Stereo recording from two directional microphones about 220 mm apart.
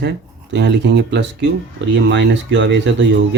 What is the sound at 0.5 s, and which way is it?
Speech, 55° right (ahead or behind).